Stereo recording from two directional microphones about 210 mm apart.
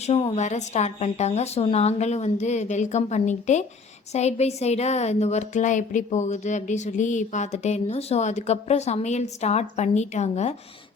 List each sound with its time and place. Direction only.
0.1 s a woman's voice: 25° left (ahead or behind)